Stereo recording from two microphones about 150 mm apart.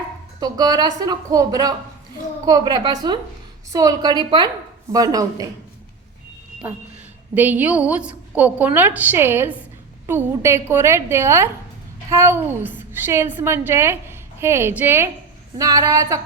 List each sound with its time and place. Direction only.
0.3 s a woman's voice: 25° right (ahead or behind)
7.3 s a woman's voice: 10° right (ahead or behind)